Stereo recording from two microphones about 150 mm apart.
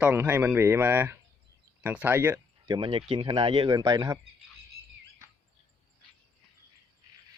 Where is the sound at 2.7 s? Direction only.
35° right (ahead or behind).